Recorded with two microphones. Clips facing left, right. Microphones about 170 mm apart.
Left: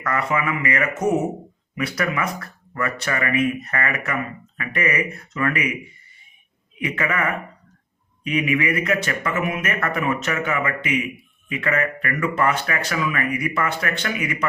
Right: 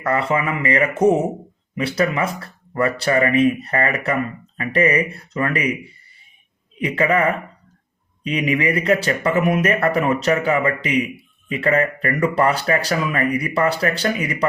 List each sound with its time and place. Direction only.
0.0 s speech: 30° right (ahead or behind)